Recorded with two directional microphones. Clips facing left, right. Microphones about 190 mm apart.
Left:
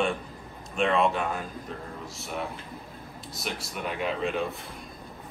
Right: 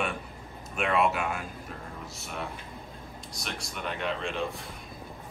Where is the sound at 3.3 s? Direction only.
5° left (ahead or behind).